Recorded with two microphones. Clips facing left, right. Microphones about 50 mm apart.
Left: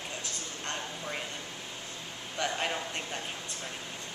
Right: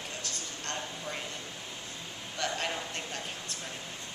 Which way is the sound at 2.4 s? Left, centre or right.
Centre.